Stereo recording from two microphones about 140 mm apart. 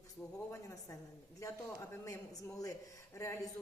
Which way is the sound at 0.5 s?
20° left (ahead or behind).